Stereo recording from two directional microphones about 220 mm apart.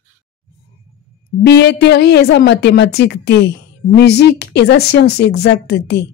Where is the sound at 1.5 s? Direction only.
50° left (ahead or behind).